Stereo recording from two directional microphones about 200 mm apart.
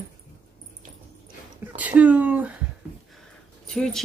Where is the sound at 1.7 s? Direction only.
10° right (ahead or behind).